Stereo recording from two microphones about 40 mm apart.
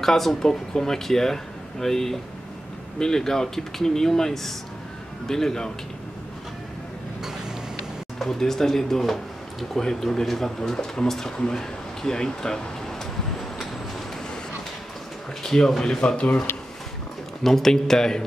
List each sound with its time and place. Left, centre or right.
0.0 s speech: centre
8.2 s speech: centre
10.7 s speech: centre
15.4 s speech: centre
16.0 s speech: left
16.5 s a sound: left
17.4 s speech: centre